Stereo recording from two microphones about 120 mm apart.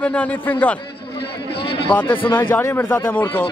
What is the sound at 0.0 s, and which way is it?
Speech, 10° left (ahead or behind).